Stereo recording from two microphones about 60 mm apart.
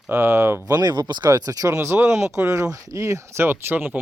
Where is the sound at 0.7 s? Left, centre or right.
Right.